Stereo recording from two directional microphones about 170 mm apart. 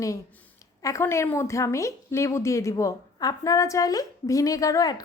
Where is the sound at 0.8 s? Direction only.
20° left (ahead or behind).